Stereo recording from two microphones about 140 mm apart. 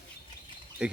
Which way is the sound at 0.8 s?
5° right (ahead or behind).